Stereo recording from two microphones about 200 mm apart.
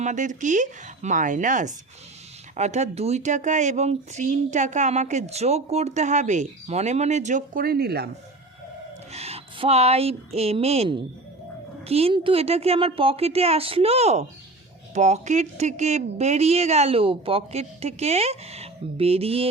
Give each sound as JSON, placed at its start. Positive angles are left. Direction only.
{"t": 0.0, "sound": "speech", "side_deg": -40}
{"t": 9.1, "sound": "a woman's voice", "side_deg": -30}